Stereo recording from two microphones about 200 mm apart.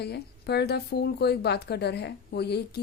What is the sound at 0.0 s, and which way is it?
Speech, 55° left (ahead or behind).